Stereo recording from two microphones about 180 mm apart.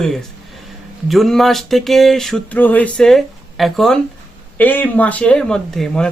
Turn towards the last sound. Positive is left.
turn(degrees=5)  # may be behind; listen again after turning